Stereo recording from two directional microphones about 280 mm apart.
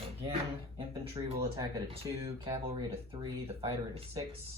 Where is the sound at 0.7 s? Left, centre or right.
Centre.